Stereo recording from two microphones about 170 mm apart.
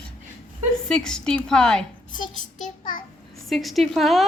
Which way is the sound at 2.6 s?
55° left (ahead or behind).